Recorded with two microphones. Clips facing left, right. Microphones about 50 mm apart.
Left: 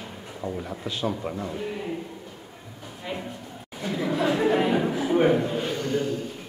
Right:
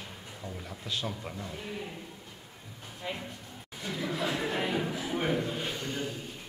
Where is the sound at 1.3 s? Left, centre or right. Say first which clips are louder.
Left 9 dB; left.